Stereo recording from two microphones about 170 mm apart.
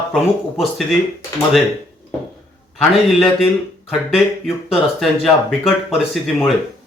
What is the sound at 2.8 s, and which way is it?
Speech, centre (ahead or behind).